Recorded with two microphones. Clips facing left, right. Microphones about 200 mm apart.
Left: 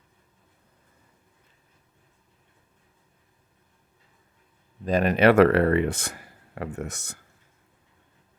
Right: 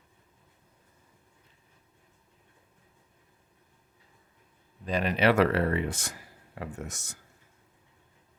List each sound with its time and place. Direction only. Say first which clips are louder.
4.9 s speech: left 6 dB; 45° left (ahead or behind)